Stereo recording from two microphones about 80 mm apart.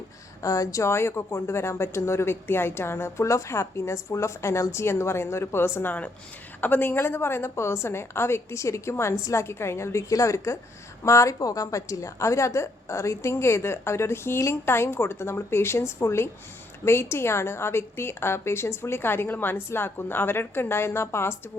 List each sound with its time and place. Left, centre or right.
0.4 s speech: left